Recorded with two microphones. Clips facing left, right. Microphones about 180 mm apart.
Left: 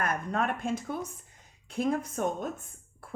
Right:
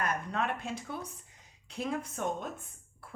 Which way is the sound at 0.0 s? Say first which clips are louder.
Left 3 dB; 50° left (ahead or behind).